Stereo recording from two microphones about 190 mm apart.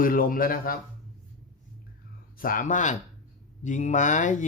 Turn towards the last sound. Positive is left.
turn(degrees=40)  # may be behind; listen again after turning